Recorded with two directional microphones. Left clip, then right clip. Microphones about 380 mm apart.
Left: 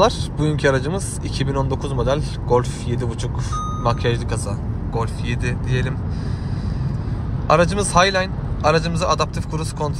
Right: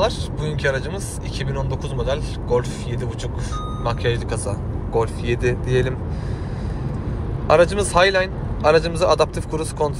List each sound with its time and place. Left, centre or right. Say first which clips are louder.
0.0 s speech: left 4 dB; centre
7.4 s speech: right 1 dB; centre